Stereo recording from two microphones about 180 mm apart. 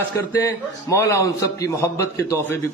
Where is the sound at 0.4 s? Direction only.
15° left (ahead or behind).